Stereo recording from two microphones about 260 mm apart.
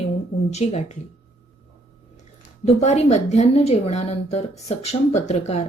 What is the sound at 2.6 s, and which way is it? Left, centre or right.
A woman's voice, left.